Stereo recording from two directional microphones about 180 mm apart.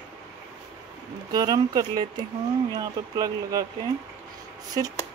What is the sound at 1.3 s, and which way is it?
Speech, 20° right (ahead or behind).